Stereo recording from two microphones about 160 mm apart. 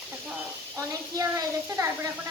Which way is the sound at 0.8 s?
20° right (ahead or behind).